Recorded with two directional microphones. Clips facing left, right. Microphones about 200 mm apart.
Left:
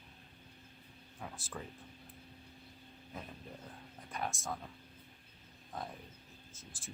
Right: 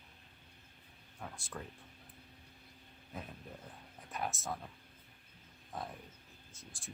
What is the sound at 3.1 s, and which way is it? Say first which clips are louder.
Speech: right 1 dB; centre (ahead or behind).